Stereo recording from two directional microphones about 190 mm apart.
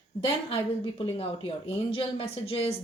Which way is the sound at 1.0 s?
30° left (ahead or behind).